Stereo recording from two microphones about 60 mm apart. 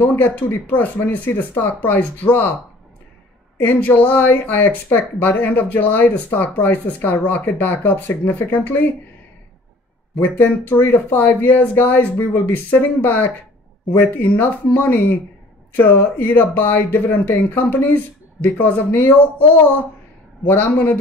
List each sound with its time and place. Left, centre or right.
0.0 s speech: left
3.5 s speech: left
10.2 s speech: left